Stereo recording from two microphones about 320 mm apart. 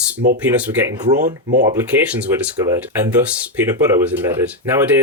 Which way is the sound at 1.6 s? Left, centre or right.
Centre.